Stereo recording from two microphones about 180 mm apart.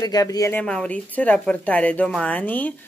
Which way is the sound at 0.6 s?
5° left (ahead or behind).